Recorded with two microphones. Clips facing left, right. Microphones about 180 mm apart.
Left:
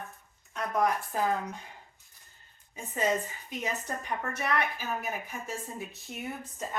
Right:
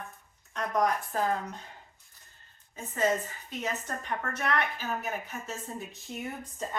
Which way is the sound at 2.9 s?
15° left (ahead or behind).